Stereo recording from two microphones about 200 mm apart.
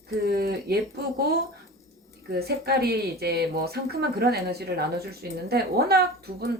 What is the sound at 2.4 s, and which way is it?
A woman's voice, 50° right (ahead or behind).